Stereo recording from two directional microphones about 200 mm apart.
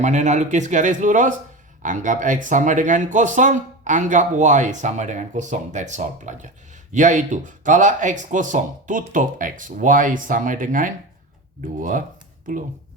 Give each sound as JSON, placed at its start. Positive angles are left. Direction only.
{"t": 0.0, "sound": "speech", "side_deg": -35}